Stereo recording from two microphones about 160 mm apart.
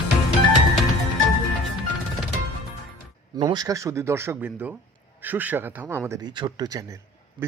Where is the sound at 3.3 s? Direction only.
25° right (ahead or behind).